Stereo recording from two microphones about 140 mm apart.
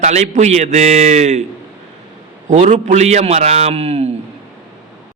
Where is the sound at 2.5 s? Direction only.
60° right (ahead or behind).